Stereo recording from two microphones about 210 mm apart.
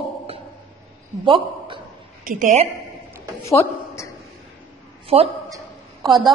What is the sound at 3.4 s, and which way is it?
Speech, 15° left (ahead or behind).